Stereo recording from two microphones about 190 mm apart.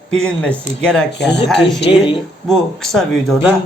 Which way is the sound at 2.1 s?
Centre (ahead or behind).